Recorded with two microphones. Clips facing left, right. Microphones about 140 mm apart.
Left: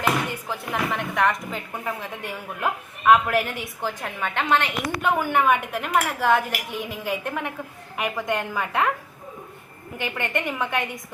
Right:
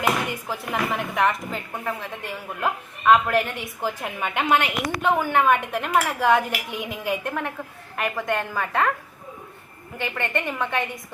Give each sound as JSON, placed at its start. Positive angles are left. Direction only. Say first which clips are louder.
{"t": 0.0, "sound": "a woman's voice", "louder": "even", "side_deg": -10}
{"t": 5.0, "sound": "a woman's voice", "louder": "right 1 dB", "side_deg": 10}
{"t": 10.0, "sound": "a woman's voice", "louder": "even", "side_deg": 10}